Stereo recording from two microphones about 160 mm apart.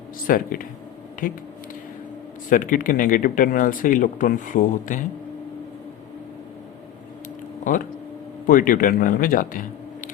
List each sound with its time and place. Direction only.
0.3 s speech: 60° left (ahead or behind)
2.5 s speech: 55° left (ahead or behind)
7.6 s speech: 55° left (ahead or behind)